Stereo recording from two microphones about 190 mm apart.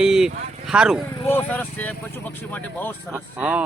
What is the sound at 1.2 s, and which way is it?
A man's voice, 10° left (ahead or behind).